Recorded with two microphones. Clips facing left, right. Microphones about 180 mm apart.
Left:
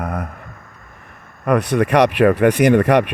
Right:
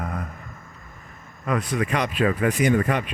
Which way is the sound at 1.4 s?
70° left (ahead or behind).